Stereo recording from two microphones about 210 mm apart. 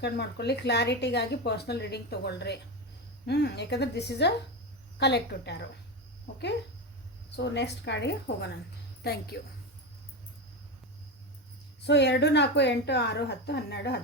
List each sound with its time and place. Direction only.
0.0 s speech: 50° left (ahead or behind)
7.3 s speech: 55° left (ahead or behind)
11.9 s speech: 55° left (ahead or behind)